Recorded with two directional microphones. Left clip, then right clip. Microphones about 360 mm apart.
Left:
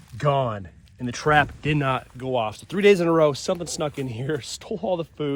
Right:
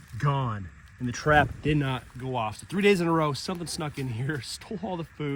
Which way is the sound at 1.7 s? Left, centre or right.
Centre.